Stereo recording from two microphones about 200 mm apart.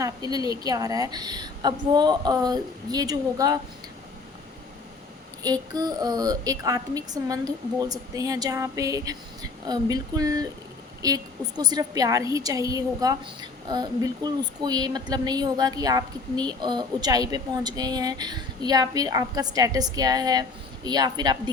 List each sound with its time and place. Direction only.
0.0 s a woman's voice: 20° right (ahead or behind)
5.4 s a woman's voice: 20° right (ahead or behind)